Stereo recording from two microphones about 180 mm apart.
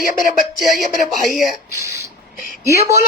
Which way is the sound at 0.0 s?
50° left (ahead or behind).